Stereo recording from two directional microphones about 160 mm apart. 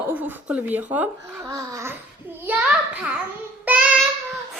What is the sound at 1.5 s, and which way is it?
Babbling, 20° right (ahead or behind).